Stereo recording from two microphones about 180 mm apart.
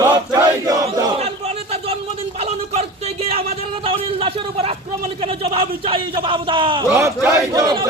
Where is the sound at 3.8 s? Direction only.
30° right (ahead or behind).